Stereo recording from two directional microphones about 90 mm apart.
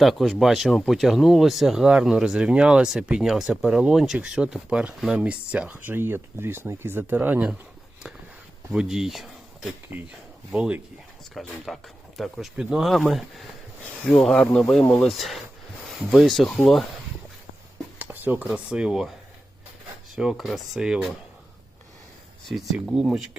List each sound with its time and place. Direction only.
0.0 s speech: centre (ahead or behind); by 7.5 s 20° right (ahead or behind)
8.7 s speech: 5° right (ahead or behind)
11.3 s speech: centre (ahead or behind)
15.1 s speech: centre (ahead or behind)
18.0 s speech: 20° right (ahead or behind); by 19.1 s 5° right (ahead or behind)
20.1 s speech: 5° right (ahead or behind)
22.4 s speech: centre (ahead or behind)